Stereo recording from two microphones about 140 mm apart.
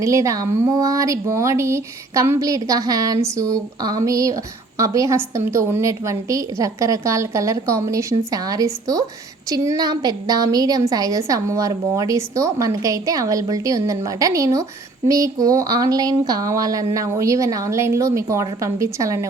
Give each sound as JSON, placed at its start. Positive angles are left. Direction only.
{"t": 0.0, "sound": "a woman's voice", "side_deg": -20}